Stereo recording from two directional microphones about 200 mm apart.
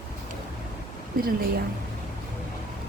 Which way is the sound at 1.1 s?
45° right (ahead or behind).